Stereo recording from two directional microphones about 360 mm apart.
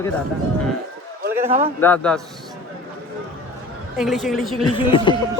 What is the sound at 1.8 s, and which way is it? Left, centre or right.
Speech, centre.